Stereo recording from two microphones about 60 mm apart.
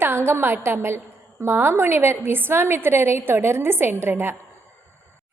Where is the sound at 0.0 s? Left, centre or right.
Right.